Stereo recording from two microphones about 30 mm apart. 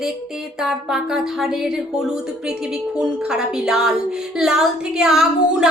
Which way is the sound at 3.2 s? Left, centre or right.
Right.